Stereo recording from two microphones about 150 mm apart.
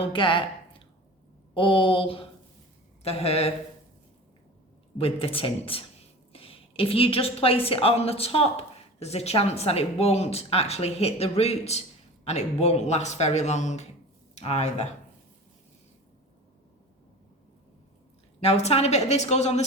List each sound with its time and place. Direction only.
0.0 s a woman's voice: 35° left (ahead or behind)
4.9 s a woman's voice: 40° left (ahead or behind)
18.3 s a woman's voice: 45° left (ahead or behind)